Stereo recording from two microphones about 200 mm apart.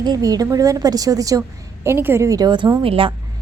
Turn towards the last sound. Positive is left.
turn(degrees=-25)  # may be behind; listen again after turning